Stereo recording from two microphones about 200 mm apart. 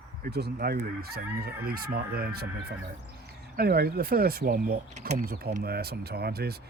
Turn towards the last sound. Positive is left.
turn(degrees=-50)  # may be behind; listen again after turning